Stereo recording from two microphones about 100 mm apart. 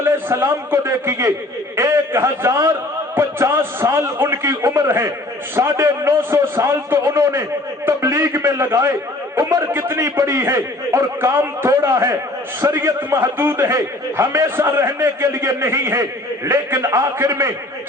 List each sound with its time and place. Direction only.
0.0 s a man's voice: 20° right (ahead or behind)
7.9 s a sound: 25° right (ahead or behind)
9.7 s a man's voice: 25° right (ahead or behind)